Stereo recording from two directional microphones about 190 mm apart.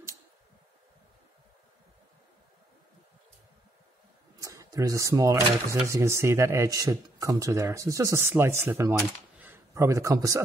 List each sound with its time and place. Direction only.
4.4 s a man's voice: 15° right (ahead or behind)